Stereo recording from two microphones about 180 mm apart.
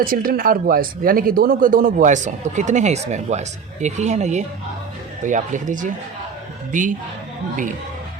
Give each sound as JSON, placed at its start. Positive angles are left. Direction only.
{"t": 0.0, "sound": "speech", "side_deg": -50}